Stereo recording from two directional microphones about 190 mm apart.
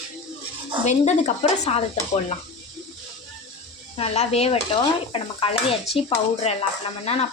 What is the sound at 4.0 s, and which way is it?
Speech, 35° left (ahead or behind).